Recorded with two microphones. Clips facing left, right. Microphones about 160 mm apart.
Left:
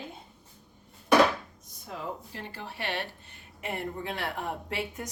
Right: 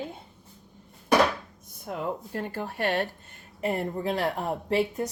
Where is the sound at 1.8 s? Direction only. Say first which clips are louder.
Right 6 dB; 50° right (ahead or behind).